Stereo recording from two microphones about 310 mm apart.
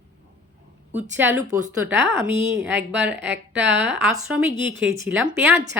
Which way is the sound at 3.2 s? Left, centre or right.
Right.